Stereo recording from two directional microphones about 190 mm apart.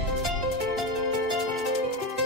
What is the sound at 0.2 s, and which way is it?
Music, centre (ahead or behind).